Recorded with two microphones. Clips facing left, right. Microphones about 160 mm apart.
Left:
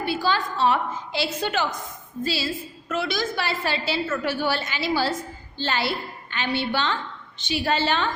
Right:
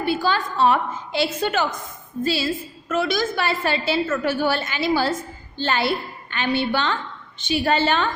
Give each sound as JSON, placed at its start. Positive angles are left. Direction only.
{"t": 0.0, "sound": "a woman's voice", "side_deg": -50}